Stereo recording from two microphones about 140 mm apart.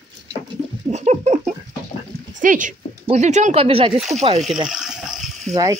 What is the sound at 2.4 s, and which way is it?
Speech, 70° right (ahead or behind).